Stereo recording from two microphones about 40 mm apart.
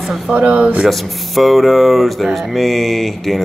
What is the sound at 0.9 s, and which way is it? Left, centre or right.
Speech, centre.